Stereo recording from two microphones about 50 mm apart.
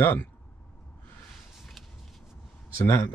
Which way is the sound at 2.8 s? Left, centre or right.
Left.